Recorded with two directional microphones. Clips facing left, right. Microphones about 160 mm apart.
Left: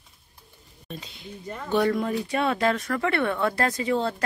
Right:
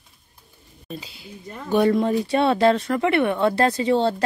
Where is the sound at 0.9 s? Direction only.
5° right (ahead or behind).